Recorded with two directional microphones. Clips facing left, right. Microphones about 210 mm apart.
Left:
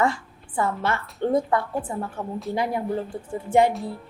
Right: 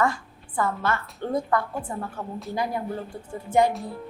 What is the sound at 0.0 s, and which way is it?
A woman's voice, 25° left (ahead or behind).